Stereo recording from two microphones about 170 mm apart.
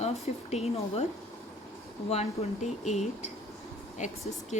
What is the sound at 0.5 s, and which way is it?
Speech, 40° left (ahead or behind).